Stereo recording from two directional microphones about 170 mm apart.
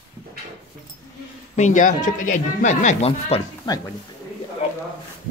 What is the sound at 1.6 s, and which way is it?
Speech, 45° left (ahead or behind).